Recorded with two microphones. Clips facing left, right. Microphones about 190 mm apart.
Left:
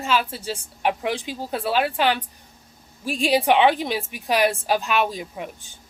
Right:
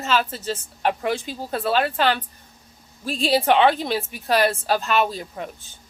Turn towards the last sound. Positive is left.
turn(degrees=15)  # may be behind; listen again after turning